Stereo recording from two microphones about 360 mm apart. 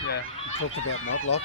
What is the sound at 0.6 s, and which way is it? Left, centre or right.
Speech, left.